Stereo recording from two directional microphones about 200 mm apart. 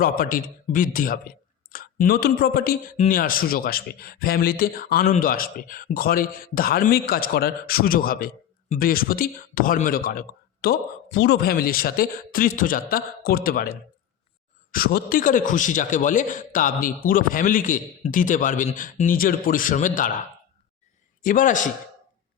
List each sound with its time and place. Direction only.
0.0 s a man's voice: 45° left (ahead or behind)
21.2 s a man's voice: 40° left (ahead or behind)